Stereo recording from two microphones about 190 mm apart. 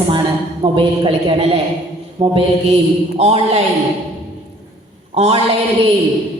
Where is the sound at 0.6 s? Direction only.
25° right (ahead or behind).